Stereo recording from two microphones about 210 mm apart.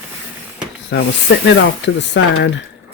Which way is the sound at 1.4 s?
60° left (ahead or behind).